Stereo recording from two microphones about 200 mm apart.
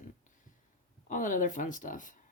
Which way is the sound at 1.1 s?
40° left (ahead or behind).